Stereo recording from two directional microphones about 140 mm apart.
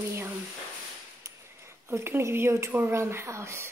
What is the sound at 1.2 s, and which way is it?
Speech, 20° right (ahead or behind).